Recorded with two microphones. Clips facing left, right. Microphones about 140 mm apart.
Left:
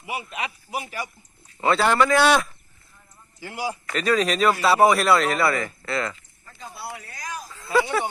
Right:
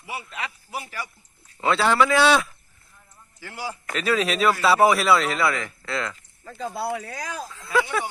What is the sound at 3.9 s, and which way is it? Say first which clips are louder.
A man's voice: left 1 dB; centre (ahead or behind).